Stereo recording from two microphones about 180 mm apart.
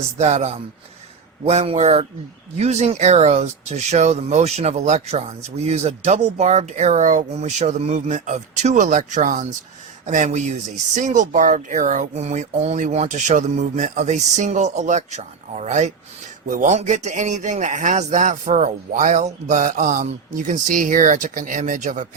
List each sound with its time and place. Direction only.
0.2 s speech: 40° right (ahead or behind)